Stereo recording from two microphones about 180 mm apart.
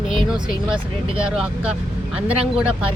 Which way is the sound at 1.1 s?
5° right (ahead or behind).